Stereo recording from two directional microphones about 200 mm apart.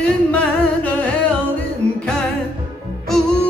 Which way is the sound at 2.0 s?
5° left (ahead or behind).